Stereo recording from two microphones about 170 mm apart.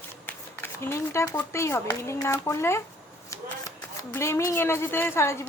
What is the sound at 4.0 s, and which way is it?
Female singing, 15° left (ahead or behind).